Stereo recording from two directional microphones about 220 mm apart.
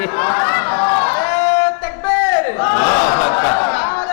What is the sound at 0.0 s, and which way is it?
Chatter, 20° left (ahead or behind).